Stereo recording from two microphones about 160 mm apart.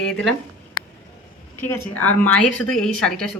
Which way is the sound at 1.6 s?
10° left (ahead or behind).